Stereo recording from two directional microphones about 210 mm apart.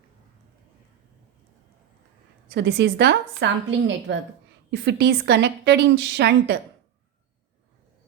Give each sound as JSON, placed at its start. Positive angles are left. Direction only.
{"t": 2.5, "sound": "a woman's voice", "side_deg": -55}